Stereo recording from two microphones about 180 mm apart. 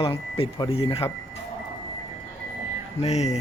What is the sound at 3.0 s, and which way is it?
Speech, 40° left (ahead or behind).